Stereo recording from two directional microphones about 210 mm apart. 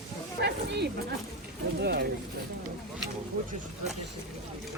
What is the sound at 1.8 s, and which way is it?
Speech, 50° right (ahead or behind).